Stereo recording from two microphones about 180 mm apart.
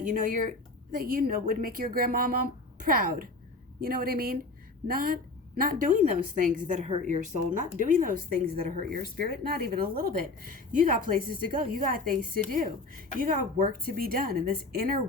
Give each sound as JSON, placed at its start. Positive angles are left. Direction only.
{"t": 0.1, "sound": "a woman's voice", "side_deg": -45}